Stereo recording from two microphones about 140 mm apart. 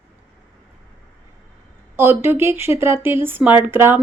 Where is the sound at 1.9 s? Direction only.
15° right (ahead or behind).